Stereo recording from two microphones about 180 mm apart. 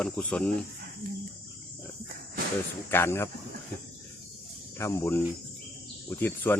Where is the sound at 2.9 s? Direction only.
15° left (ahead or behind).